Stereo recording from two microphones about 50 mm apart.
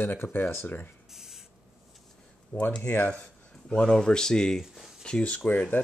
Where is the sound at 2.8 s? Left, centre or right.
Left.